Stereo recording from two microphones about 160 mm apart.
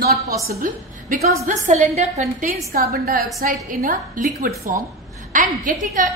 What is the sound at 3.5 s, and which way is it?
A woman's voice, 55° right (ahead or behind).